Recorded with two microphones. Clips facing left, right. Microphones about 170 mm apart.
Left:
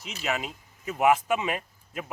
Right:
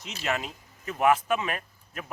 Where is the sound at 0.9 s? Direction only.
10° left (ahead or behind).